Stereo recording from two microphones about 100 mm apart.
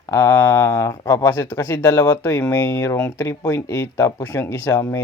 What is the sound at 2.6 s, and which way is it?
Speech, 30° left (ahead or behind).